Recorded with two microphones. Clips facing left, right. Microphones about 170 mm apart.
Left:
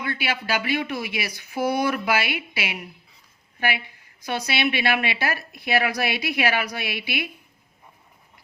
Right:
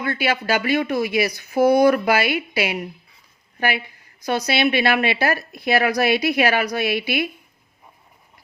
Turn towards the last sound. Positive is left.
turn(degrees=-40)  # may be behind; listen again after turning